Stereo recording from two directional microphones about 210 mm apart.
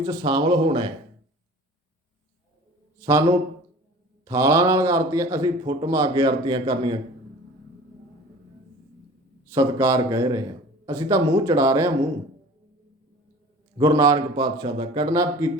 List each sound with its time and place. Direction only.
0.0 s speech: 20° right (ahead or behind)
3.0 s a man's voice: 15° right (ahead or behind)
9.5 s a man's voice: 15° right (ahead or behind)
13.7 s speech: 15° right (ahead or behind)